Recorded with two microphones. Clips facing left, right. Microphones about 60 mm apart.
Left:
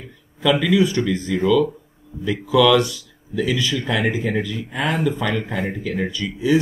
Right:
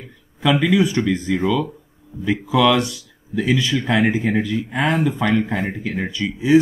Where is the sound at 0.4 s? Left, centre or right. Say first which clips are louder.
Even; right.